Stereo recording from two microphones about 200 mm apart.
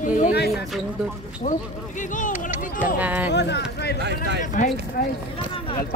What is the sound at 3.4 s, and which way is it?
Speech, 60° left (ahead or behind).